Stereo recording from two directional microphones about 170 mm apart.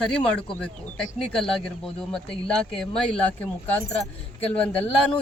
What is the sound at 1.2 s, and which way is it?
Speech, 5° left (ahead or behind).